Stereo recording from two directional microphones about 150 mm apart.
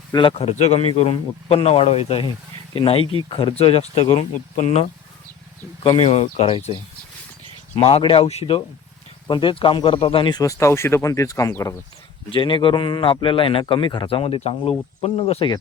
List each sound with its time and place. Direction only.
0.1 s a man's voice: 35° left (ahead or behind)
7.8 s a man's voice: 40° left (ahead or behind); by 11.8 s 20° left (ahead or behind)
12.3 s a man's voice: 35° left (ahead or behind)